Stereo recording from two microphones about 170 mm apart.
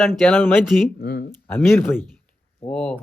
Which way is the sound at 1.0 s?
65° left (ahead or behind).